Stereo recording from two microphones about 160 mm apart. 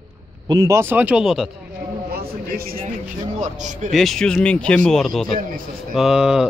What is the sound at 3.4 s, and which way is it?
Speech, 50° right (ahead or behind).